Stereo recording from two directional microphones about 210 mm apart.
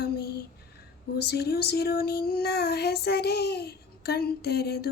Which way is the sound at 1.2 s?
50° left (ahead or behind).